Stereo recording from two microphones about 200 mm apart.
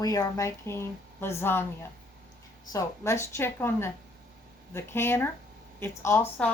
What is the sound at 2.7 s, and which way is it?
Speech, 15° left (ahead or behind).